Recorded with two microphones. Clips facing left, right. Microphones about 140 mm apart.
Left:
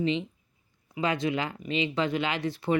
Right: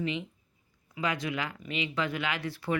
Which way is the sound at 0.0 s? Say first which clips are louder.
Left 5 dB; 25° left (ahead or behind).